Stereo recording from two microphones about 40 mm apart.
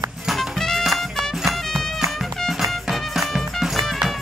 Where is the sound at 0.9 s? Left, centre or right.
Centre.